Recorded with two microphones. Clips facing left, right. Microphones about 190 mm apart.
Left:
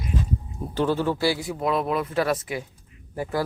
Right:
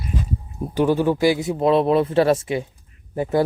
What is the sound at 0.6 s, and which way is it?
Speech, 15° right (ahead or behind).